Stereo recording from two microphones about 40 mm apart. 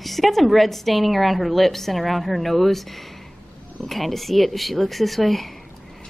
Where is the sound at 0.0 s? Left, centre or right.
Centre.